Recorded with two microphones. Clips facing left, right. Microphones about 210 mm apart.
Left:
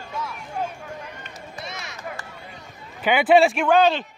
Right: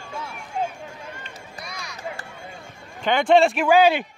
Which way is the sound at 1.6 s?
25° left (ahead or behind).